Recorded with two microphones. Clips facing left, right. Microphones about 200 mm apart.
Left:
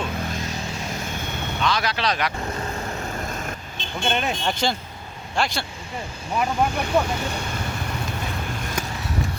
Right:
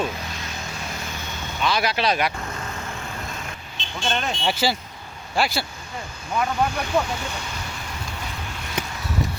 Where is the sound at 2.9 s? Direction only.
45° left (ahead or behind).